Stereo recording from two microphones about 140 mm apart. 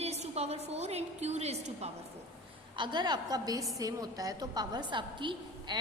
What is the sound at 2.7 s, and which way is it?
A woman's voice, 35° right (ahead or behind).